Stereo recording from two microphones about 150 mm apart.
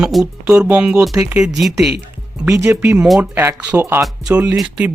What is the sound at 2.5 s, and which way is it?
Speech, 20° right (ahead or behind).